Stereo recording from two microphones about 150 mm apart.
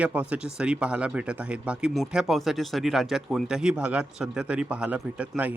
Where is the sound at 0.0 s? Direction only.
10° right (ahead or behind).